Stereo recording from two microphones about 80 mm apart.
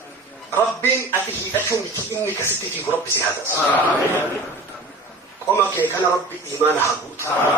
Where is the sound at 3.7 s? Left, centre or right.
Left.